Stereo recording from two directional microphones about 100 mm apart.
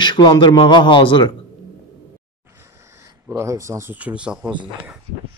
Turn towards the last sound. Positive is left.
turn(degrees=-10)  # may be behind; listen again after turning